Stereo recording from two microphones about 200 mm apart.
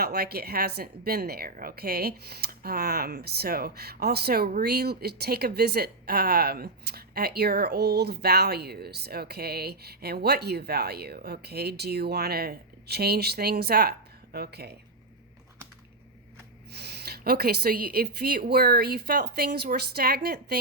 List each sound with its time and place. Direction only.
0.0 s a woman's voice: 50° right (ahead or behind)
16.7 s a woman's voice: 55° right (ahead or behind)